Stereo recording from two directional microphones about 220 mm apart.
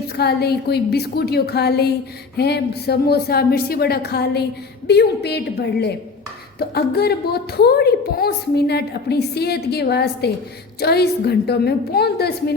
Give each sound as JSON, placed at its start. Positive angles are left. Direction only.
{"t": 0.2, "sound": "a woman's voice", "side_deg": 45}